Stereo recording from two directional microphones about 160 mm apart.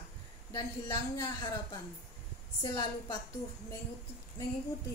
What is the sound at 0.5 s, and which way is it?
A woman's voice, 20° left (ahead or behind).